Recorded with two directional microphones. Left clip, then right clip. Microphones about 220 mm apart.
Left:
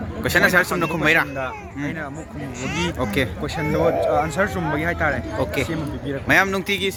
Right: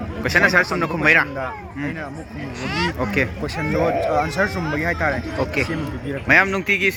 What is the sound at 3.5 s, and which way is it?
Speech, 60° left (ahead or behind).